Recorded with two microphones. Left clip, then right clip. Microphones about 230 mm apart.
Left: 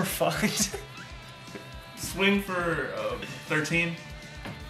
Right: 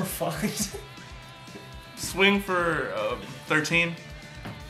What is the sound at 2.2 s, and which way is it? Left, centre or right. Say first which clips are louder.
Speech: right 3 dB; centre.